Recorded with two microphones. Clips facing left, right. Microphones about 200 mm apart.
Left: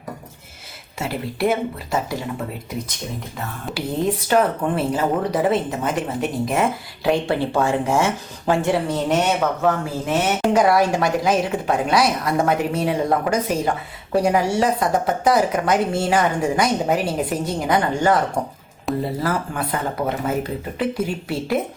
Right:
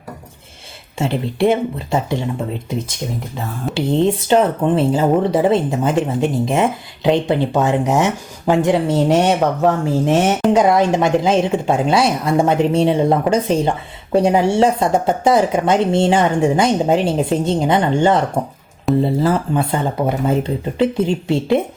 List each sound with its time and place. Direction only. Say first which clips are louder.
1.5 s speech: right 4 dB; 25° right (ahead or behind)
3.8 s speech: right 6 dB; 25° right (ahead or behind)